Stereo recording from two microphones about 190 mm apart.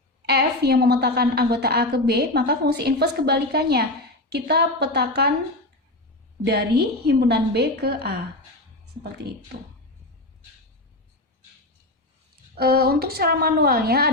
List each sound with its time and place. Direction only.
0.3 s a woman's voice: 55° right (ahead or behind)
6.4 s a woman's voice: 55° right (ahead or behind)
9.1 s a woman's voice: 55° right (ahead or behind)
12.5 s a woman's voice: 55° right (ahead or behind)